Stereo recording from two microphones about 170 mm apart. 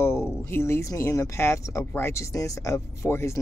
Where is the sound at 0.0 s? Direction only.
15° left (ahead or behind).